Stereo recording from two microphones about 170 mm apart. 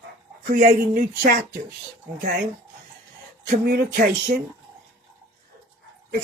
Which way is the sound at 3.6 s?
65° right (ahead or behind).